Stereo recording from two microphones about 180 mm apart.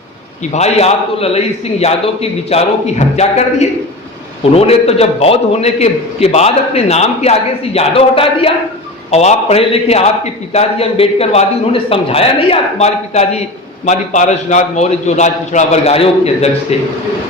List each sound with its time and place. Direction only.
0.5 s a man's voice: 35° left (ahead or behind)